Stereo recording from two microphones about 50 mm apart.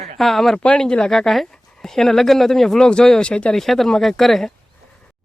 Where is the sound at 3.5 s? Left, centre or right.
Centre.